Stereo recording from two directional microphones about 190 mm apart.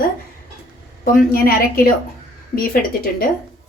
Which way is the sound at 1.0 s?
50° left (ahead or behind).